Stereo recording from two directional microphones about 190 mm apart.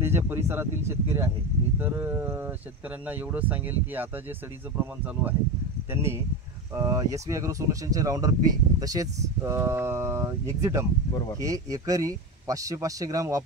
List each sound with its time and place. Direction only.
0.0 s speech: 15° right (ahead or behind)
5.9 s speech: 15° right (ahead or behind)